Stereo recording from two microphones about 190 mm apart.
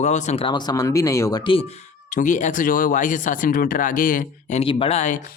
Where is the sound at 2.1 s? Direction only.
40° left (ahead or behind).